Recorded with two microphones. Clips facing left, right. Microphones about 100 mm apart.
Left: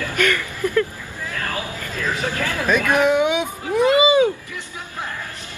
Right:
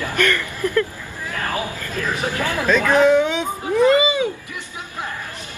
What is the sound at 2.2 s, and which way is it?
Speech, 20° right (ahead or behind).